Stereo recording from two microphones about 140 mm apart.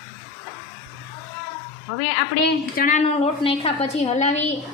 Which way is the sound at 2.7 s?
70° left (ahead or behind).